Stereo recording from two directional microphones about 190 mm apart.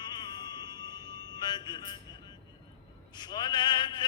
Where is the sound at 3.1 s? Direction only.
20° left (ahead or behind).